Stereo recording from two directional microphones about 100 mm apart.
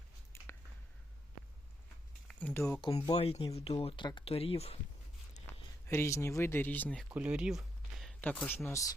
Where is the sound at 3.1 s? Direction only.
85° left.